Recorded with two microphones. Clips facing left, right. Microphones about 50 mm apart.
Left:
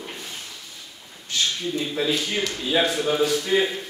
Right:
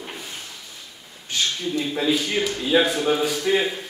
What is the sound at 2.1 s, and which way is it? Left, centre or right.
A man's voice, centre.